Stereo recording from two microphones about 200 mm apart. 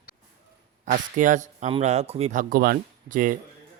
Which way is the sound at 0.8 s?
40° right (ahead or behind).